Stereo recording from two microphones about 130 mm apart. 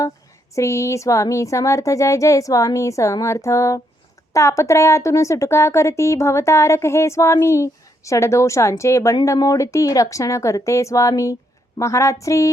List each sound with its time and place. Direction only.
0.5 s speech: 20° left (ahead or behind)